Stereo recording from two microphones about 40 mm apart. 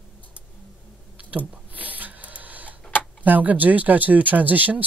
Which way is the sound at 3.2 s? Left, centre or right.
Right.